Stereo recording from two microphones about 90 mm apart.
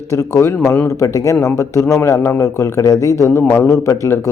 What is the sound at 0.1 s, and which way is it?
A man's voice, 35° left (ahead or behind).